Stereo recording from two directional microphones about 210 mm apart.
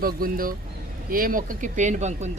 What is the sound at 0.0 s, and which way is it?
Speech, 45° right (ahead or behind).